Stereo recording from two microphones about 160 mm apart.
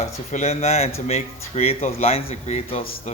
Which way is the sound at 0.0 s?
45° left (ahead or behind).